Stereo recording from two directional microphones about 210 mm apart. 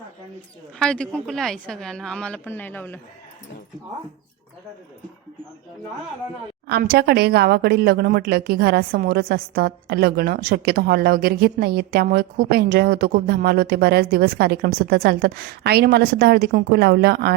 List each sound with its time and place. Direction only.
0.8 s a woman's voice: 5° left (ahead or behind)
6.7 s speech: 50° right (ahead or behind)